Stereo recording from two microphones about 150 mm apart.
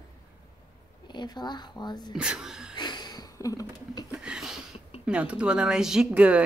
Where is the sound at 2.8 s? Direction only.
30° left (ahead or behind).